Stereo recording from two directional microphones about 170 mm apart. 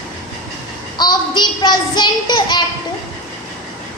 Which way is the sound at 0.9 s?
25° left (ahead or behind).